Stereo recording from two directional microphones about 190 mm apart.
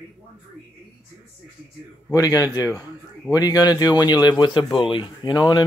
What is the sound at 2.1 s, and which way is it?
A man's voice, 20° left (ahead or behind).